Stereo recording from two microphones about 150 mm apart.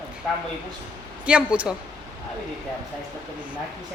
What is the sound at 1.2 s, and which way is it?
Speech, 5° right (ahead or behind).